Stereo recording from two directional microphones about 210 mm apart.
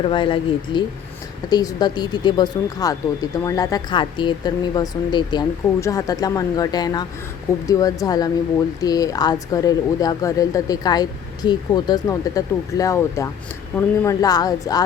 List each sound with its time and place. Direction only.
0.0 s speech: 25° left (ahead or behind)